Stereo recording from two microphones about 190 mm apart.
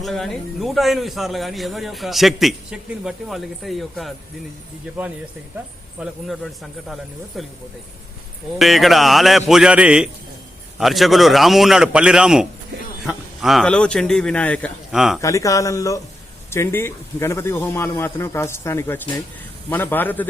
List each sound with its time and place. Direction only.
0.0 s a man's voice: centre (ahead or behind)
6.0 s a man's voice: centre (ahead or behind)
8.5 s a man's voice: centre (ahead or behind)
15.2 s a man's voice: 15° left (ahead or behind)